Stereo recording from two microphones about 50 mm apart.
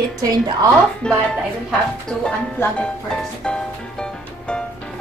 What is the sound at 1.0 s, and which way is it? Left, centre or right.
Speech, centre.